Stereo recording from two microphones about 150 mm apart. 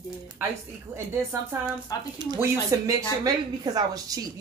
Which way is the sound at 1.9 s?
25° left (ahead or behind).